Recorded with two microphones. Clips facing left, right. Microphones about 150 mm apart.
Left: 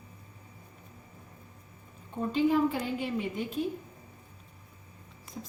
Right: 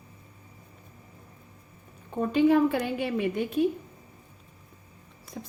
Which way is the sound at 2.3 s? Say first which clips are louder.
Right 5 dB; 70° right (ahead or behind).